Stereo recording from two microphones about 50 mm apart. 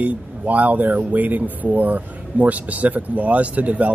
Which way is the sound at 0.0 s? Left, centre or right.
Right.